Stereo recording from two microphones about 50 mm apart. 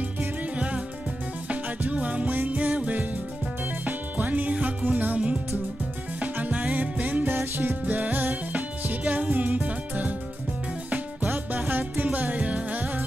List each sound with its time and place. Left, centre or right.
1.5 s music: right
7.3 s music: right
7.8 s music: right
11.7 s music: right